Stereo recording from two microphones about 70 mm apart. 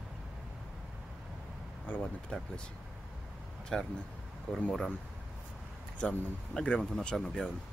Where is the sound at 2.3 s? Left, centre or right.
Centre.